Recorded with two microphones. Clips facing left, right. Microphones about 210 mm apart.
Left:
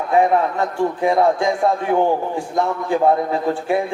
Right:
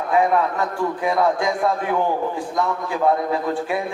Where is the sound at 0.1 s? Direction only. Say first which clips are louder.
Left 2 dB; 25° left (ahead or behind).